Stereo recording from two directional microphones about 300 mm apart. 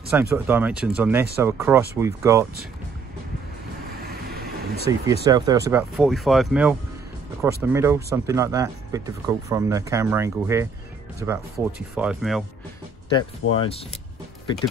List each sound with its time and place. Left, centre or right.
0.1 s speech: centre
4.1 s vehicle: right
5.0 s speech: centre
13.6 s speech: centre